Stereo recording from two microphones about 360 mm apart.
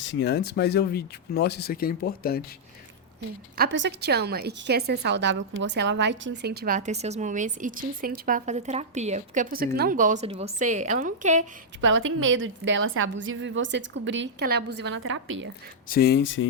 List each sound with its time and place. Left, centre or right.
0.0 s speech: left
3.6 s a woman's voice: right
11.8 s a woman's voice: right
15.9 s speech: left